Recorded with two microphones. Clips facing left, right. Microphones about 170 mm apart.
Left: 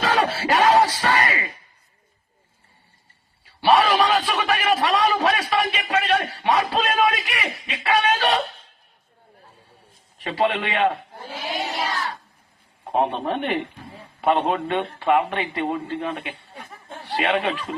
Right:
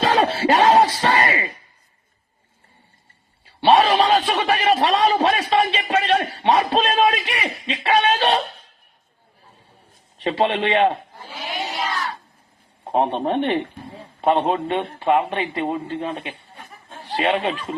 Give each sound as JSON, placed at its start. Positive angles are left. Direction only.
{"t": 0.0, "sound": "music", "side_deg": -25}
{"t": 3.6, "sound": "a sound", "side_deg": -25}
{"t": 10.2, "sound": "a man's voice", "side_deg": -25}
{"t": 12.8, "sound": "a man's voice", "side_deg": -30}